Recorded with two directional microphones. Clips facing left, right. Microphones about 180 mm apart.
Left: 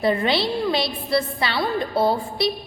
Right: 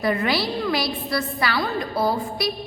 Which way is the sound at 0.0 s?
25° left (ahead or behind).